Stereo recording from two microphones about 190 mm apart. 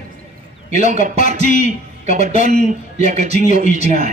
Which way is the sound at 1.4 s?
40° left (ahead or behind).